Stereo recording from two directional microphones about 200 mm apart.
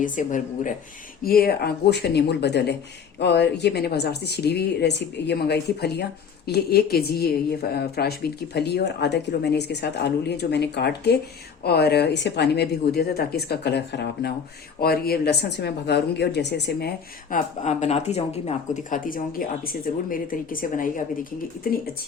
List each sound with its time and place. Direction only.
0.0 s a woman's voice: 40° left (ahead or behind)
17.3 s speech: 35° left (ahead or behind)